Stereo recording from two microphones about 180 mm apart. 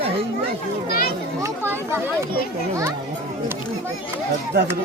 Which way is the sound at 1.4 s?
15° right (ahead or behind).